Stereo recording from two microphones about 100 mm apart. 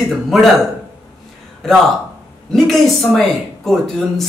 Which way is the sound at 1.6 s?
5° left (ahead or behind).